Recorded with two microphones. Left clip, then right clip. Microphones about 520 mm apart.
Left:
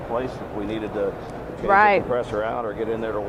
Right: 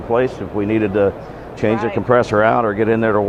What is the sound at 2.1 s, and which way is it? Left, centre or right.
Speech, right.